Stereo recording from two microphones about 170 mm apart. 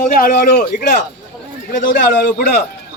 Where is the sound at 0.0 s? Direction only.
55° left (ahead or behind).